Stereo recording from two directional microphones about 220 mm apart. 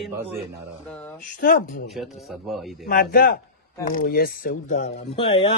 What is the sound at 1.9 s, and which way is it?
Speech, centre (ahead or behind).